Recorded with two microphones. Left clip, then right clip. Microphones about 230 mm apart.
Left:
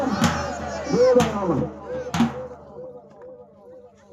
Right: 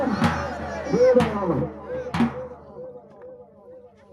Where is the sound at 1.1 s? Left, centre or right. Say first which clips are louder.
Left 1 dB; left.